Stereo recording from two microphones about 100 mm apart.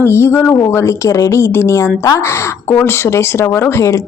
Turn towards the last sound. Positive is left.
turn(degrees=25)  # may be behind; listen again after turning